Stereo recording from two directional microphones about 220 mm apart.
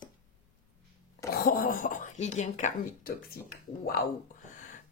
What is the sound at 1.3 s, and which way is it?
Speech, 40° left (ahead or behind).